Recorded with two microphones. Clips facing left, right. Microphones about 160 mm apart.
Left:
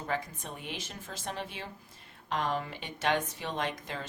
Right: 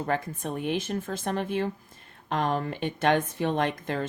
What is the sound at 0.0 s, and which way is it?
Speech, 55° right (ahead or behind).